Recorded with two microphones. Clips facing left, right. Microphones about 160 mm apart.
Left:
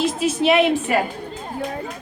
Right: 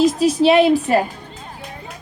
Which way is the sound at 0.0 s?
35° right (ahead or behind).